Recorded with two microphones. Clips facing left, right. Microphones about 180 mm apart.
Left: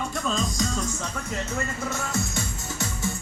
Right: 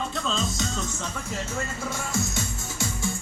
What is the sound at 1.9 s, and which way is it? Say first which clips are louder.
Music: even; 10° right (ahead or behind).